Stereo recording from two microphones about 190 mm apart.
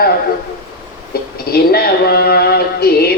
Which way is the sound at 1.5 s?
55° left (ahead or behind).